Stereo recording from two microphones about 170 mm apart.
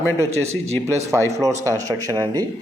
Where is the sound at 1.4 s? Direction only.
20° right (ahead or behind).